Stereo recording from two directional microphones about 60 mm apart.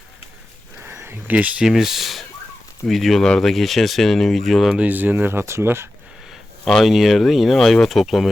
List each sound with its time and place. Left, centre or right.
0.9 s a sound: right
1.3 s speech: right
1.6 s speech: centre
4.8 s speech: right
6.8 s speech: centre